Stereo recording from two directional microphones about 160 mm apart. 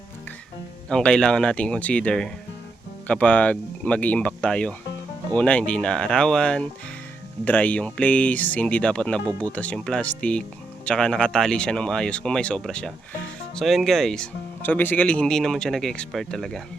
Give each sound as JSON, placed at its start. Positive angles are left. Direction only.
{"t": 0.9, "sound": "speech", "side_deg": 5}